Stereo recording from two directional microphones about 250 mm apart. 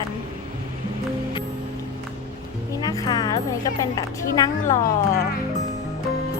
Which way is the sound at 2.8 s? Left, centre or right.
Centre.